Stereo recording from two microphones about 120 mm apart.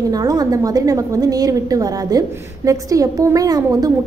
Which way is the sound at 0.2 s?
30° right (ahead or behind).